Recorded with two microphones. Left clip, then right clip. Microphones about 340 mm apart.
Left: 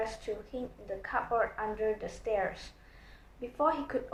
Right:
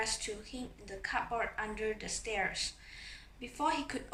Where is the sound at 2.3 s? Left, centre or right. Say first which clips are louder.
Left 4 dB; right.